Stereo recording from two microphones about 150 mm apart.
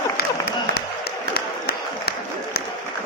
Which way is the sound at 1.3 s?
90° left.